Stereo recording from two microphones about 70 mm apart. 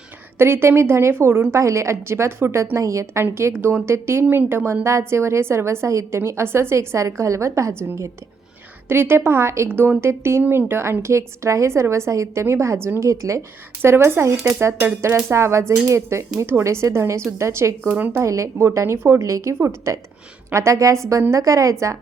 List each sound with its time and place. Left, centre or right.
0.3 s a woman's voice: right
9.6 s a woman's voice: right
13.8 s a woman's voice: right
17.9 s speech: right
18.2 s a woman's voice: right